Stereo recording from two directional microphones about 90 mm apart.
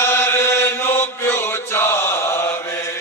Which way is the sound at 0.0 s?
25° left (ahead or behind).